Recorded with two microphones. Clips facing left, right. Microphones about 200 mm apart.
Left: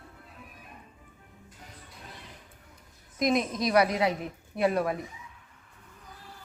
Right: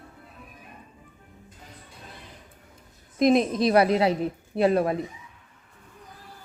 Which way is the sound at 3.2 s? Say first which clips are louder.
Right 7 dB; 30° right (ahead or behind).